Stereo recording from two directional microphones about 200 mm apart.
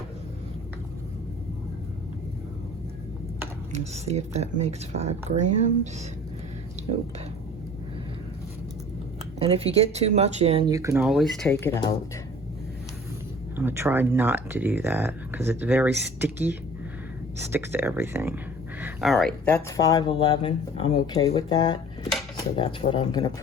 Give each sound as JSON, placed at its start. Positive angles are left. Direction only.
{"t": 3.7, "sound": "speech", "side_deg": -35}
{"t": 9.4, "sound": "speech", "side_deg": -30}
{"t": 10.7, "sound": "speech", "side_deg": -15}
{"t": 11.0, "sound": "speech", "side_deg": 0}
{"t": 11.5, "sound": "speech", "side_deg": 15}
{"t": 13.6, "sound": "speech", "side_deg": -10}